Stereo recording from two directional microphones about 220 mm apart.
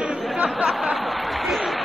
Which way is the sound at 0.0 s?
Centre (ahead or behind).